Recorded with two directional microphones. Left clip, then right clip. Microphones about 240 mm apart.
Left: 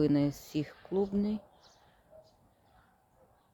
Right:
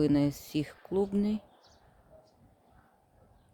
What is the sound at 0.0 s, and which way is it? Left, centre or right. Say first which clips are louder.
Speech: right 1 dB; centre.